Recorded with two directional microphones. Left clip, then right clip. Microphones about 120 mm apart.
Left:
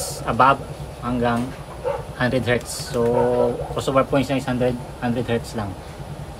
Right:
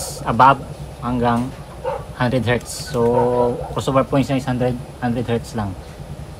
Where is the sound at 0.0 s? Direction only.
60° right (ahead or behind).